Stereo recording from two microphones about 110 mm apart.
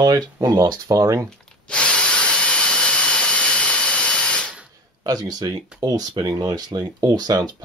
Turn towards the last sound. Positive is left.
turn(degrees=-40)  # may be behind; listen again after turning